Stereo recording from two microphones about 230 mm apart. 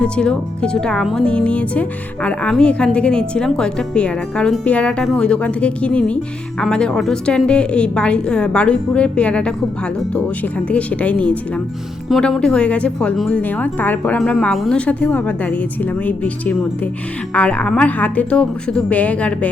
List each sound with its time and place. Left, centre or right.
0.0 s speech: centre
10.7 s speech: centre